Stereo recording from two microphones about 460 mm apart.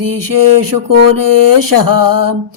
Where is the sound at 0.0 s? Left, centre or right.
Right.